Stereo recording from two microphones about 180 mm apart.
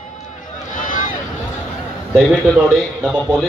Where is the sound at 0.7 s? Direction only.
45° left (ahead or behind).